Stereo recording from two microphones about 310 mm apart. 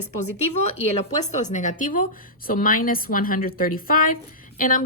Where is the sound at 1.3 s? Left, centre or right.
Left.